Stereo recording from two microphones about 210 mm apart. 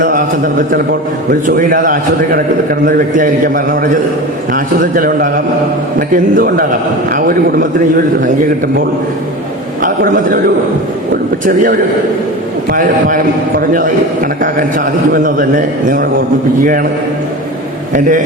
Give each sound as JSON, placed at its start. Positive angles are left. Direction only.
{"t": 0.0, "sound": "a man's voice", "side_deg": -40}
{"t": 6.3, "sound": "a man's voice", "side_deg": -40}
{"t": 9.8, "sound": "a man's voice", "side_deg": -40}
{"t": 15.1, "sound": "a man's voice", "side_deg": -40}